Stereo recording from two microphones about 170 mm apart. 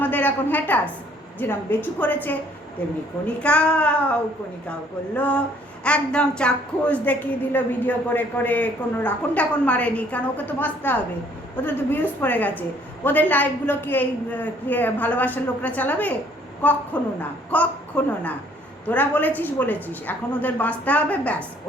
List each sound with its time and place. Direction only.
0.0 s a woman's voice: 10° left (ahead or behind)
3.4 s speech: 5° left (ahead or behind)